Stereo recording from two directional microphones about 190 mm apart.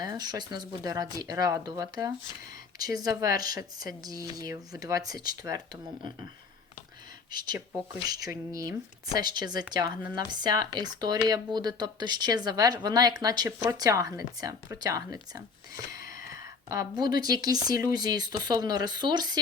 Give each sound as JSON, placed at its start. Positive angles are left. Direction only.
{"t": 0.0, "sound": "speech", "side_deg": -20}
{"t": 7.3, "sound": "speech", "side_deg": -20}
{"t": 16.6, "sound": "speech", "side_deg": -20}